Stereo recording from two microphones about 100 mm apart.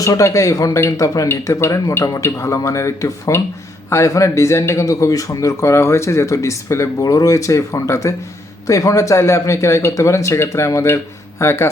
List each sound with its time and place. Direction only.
0.0 s a man's voice: 30° left (ahead or behind)